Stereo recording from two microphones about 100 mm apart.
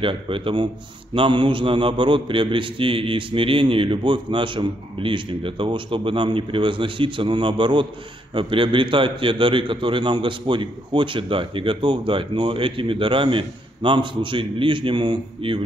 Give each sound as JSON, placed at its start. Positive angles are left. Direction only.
{"t": 0.0, "sound": "a man's voice", "side_deg": -60}